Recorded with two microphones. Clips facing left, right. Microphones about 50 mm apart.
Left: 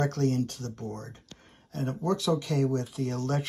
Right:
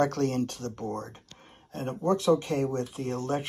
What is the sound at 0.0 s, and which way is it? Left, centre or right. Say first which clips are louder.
Speech: right 1 dB; right.